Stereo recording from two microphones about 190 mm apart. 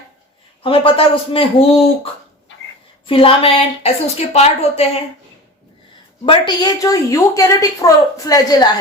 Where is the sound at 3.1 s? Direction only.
30° left (ahead or behind).